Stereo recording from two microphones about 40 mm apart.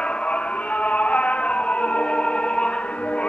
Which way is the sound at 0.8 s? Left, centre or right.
Left.